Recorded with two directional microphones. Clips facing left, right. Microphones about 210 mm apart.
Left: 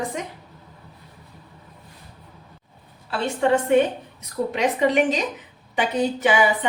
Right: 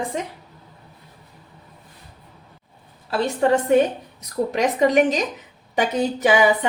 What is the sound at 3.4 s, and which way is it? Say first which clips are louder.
A woman's voice: right 1 dB; 40° right (ahead or behind).